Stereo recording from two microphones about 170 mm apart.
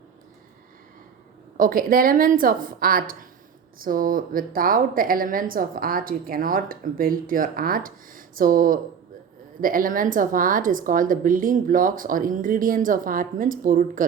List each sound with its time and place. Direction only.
1.5 s a woman's voice: 55° right (ahead or behind)